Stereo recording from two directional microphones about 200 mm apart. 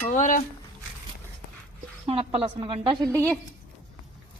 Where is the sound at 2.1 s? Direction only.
30° right (ahead or behind).